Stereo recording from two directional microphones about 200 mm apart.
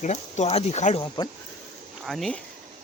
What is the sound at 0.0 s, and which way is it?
Speech, 35° left (ahead or behind).